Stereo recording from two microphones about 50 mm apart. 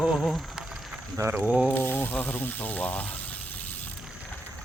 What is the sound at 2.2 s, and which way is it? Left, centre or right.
Speech, left.